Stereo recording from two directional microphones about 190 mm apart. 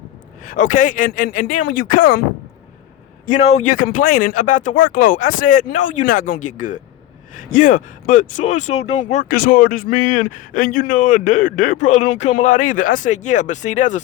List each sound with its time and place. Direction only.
0.4 s a man's voice: 45° left (ahead or behind)
3.2 s a man's voice: 35° left (ahead or behind)
9.3 s a man's voice: 50° left (ahead or behind)